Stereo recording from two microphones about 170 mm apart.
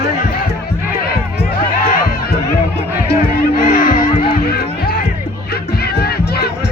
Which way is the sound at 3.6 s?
60° left (ahead or behind).